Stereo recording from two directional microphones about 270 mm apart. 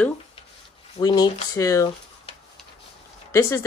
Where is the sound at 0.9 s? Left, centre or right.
Centre.